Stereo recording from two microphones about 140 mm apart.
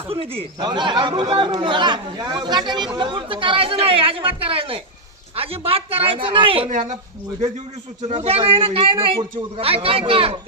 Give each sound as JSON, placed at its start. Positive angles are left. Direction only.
{"t": 0.1, "sound": "speech", "side_deg": -40}
{"t": 8.0, "sound": "a man's voice", "side_deg": -45}